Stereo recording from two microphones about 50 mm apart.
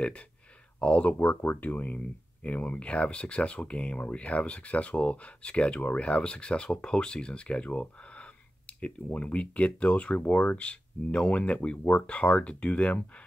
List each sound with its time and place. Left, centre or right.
0.7 s speech: left
1.1 s speech: left
1.6 s speech: left